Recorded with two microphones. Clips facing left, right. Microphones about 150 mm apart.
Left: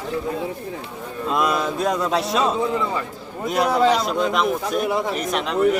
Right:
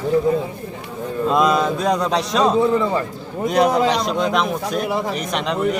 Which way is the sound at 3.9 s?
5° left (ahead or behind).